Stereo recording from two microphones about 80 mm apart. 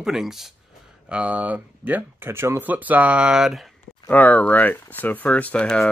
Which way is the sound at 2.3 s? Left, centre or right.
Right.